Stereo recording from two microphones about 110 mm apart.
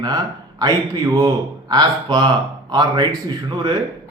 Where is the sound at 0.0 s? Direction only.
35° right (ahead or behind).